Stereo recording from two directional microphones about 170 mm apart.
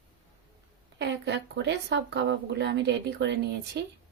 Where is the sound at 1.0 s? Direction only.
90° right.